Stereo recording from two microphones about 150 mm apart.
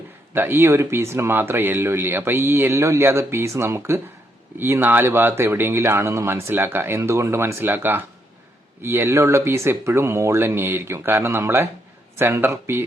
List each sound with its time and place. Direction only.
0.3 s speech: 15° right (ahead or behind)